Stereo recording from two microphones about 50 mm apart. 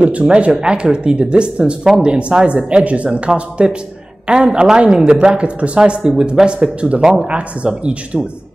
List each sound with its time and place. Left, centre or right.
0.0 s a woman's voice: right